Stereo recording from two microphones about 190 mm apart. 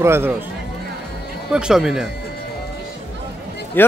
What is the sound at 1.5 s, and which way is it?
Speech, 5° right (ahead or behind).